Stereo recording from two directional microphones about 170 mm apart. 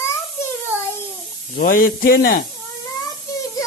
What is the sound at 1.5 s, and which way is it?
Speech, 60° left (ahead or behind).